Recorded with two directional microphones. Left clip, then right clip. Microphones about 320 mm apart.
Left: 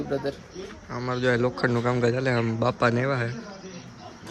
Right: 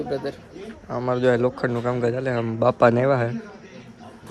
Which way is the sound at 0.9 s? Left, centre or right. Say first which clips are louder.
Right 5 dB; centre.